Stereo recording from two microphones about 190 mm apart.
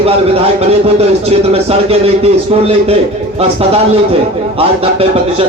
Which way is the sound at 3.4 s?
30° right (ahead or behind).